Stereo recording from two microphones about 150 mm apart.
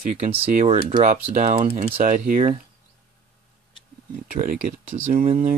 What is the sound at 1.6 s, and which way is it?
Speech, 60° right (ahead or behind).